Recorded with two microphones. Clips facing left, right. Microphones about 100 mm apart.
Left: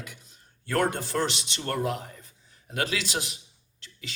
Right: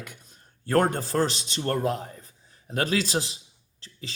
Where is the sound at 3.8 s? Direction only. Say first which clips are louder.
Right 2 dB; 35° right (ahead or behind).